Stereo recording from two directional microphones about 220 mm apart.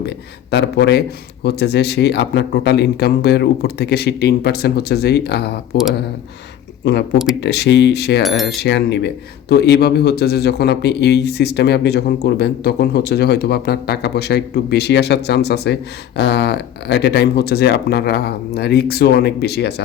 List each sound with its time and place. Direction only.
0.5 s speech: 50° left (ahead or behind)
6.8 s speech: 50° left (ahead or behind)